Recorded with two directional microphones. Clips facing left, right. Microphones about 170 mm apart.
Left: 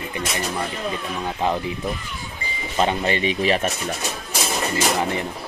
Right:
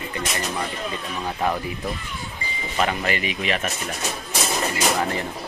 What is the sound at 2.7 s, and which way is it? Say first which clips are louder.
Speech: left 3 dB; 25° left (ahead or behind).